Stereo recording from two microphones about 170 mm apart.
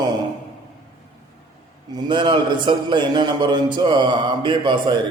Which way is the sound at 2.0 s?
25° right (ahead or behind).